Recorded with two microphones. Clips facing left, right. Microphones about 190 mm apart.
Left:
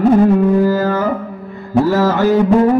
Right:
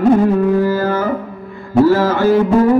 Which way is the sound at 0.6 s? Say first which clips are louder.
Left 1 dB; 40° left (ahead or behind).